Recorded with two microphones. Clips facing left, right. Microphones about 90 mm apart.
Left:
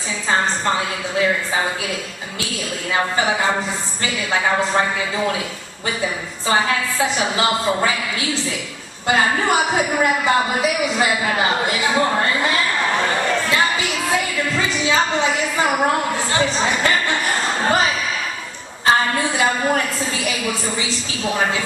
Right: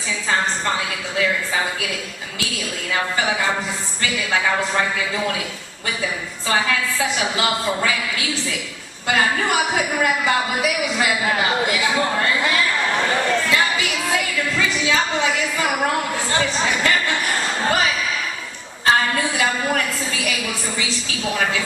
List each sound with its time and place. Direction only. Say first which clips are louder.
0.3 s speech: left 3 dB; 30° left (ahead or behind)
2.9 s a man's voice: left 2 dB; 30° left (ahead or behind)
6.5 s a woman's voice: left 2 dB; 30° left (ahead or behind)
19.1 s speech: left 2 dB; 25° left (ahead or behind)